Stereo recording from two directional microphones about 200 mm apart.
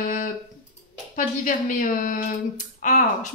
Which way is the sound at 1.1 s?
40° left (ahead or behind).